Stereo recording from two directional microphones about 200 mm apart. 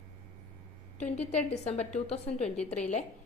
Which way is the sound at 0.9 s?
35° left (ahead or behind).